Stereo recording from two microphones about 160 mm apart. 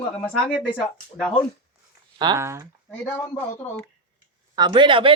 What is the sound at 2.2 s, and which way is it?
Speech, 20° right (ahead or behind).